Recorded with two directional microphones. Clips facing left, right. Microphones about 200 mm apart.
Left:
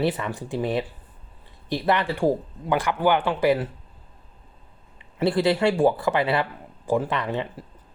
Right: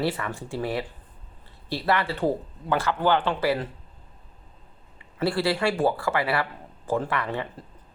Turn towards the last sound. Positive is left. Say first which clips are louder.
# left 3 dB
turn(degrees=20)  # may be behind; listen again after turning